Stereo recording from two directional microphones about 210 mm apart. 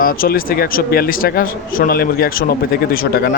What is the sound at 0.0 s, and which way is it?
A man's voice, 40° left (ahead or behind).